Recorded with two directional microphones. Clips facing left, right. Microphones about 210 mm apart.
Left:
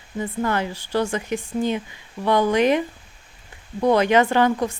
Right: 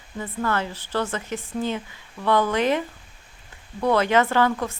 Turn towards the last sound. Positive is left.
turn(degrees=15)  # may be behind; listen again after turning